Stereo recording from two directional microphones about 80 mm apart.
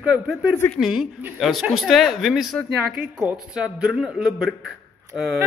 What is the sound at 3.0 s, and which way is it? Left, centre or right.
A man's voice, centre.